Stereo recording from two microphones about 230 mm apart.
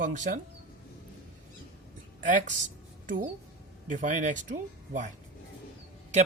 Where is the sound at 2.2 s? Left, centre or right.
Right.